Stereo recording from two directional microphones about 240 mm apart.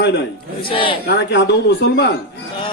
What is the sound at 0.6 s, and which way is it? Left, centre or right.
Speech, left.